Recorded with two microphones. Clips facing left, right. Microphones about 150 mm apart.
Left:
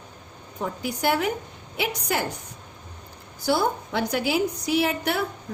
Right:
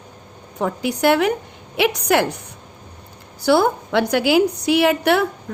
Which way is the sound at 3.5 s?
75° right (ahead or behind).